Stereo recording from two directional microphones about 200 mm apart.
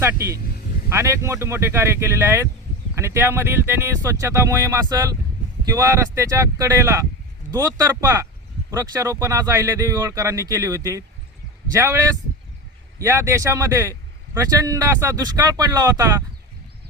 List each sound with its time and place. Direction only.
0.0 s speech: 15° right (ahead or behind)